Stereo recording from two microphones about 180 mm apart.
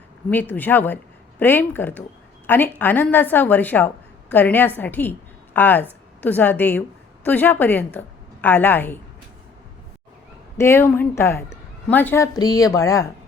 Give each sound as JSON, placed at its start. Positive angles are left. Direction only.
{"t": 0.3, "sound": "a woman's voice", "side_deg": 10}
{"t": 10.6, "sound": "a woman's voice", "side_deg": 15}